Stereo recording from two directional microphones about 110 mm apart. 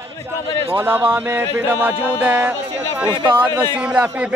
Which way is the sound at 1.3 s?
20° right (ahead or behind).